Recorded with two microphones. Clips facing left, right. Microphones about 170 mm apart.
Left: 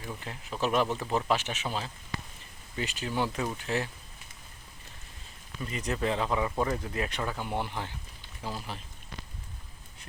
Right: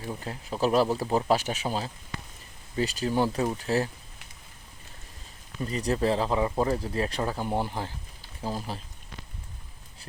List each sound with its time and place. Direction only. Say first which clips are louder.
0.0 s speech: right 5 dB; 35° right (ahead or behind)
5.5 s speech: right 5 dB; 35° right (ahead or behind)